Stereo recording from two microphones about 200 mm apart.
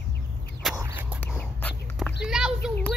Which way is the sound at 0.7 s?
15° right (ahead or behind).